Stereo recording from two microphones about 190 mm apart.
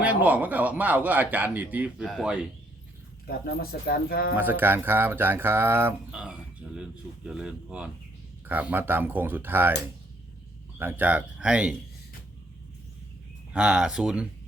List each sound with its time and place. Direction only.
0.0 s speech: 10° right (ahead or behind)
3.2 s speech: 55° left (ahead or behind)
4.4 s speech: 10° right (ahead or behind)
10.8 s speech: 10° right (ahead or behind)
13.5 s speech: 5° right (ahead or behind)